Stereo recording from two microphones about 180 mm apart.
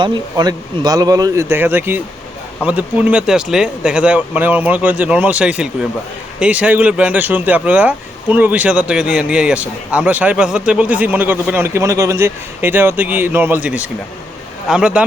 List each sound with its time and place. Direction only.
0.0 s speech: 25° right (ahead or behind); by 15.0 s 5° right (ahead or behind)